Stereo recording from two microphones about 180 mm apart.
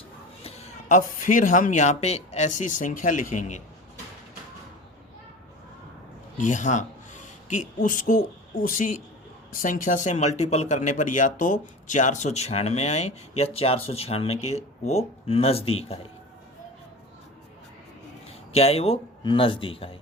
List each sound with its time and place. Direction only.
0.4 s speech: 35° left (ahead or behind)
6.3 s speech: 45° left (ahead or behind)
18.3 s speech: 35° left (ahead or behind)